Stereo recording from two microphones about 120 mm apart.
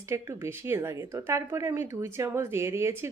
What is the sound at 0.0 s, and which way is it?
A woman's voice, 20° right (ahead or behind).